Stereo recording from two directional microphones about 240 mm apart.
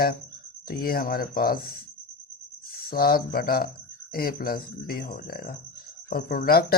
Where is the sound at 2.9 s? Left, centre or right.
Left.